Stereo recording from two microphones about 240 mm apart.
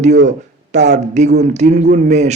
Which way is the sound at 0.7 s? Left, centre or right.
Right.